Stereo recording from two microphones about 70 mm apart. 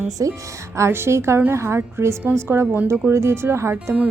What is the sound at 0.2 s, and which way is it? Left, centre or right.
Speech, right.